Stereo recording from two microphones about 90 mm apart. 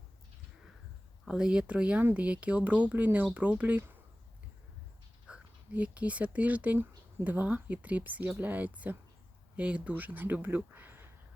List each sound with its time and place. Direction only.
1.2 s speech: 10° right (ahead or behind)
5.2 s speech: 15° right (ahead or behind)